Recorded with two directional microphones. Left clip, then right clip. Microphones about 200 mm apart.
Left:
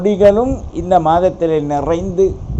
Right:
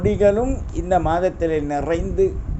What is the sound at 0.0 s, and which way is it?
Speech, 15° right (ahead or behind).